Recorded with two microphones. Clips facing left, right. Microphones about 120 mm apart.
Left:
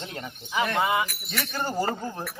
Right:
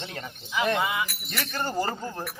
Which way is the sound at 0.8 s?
30° left (ahead or behind).